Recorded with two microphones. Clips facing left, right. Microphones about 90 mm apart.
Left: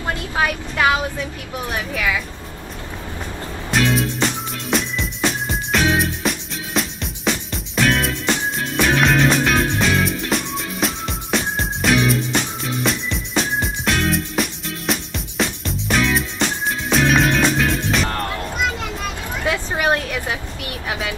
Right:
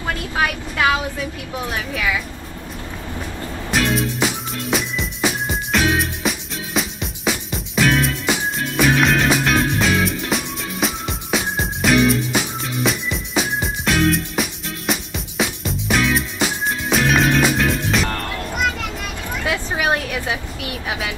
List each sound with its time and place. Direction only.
0.4 s speech: 20° left (ahead or behind)
3.7 s music: centre (ahead or behind)